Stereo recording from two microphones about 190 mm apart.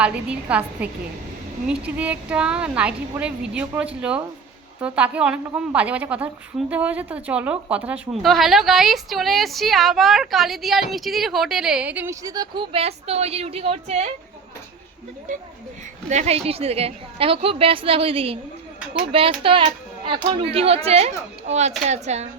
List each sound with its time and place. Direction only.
0.0 s a woman's voice: 5° right (ahead or behind); by 14.1 s 35° right (ahead or behind)
16.0 s a woman's voice: 35° right (ahead or behind)